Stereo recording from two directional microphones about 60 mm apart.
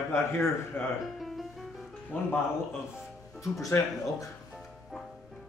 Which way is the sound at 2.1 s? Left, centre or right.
Left.